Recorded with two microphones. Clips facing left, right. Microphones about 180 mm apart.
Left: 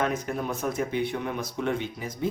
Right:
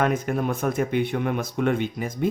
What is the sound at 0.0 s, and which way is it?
Speech, 55° right (ahead or behind).